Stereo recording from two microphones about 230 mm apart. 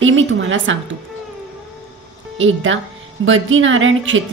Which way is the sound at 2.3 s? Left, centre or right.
Right.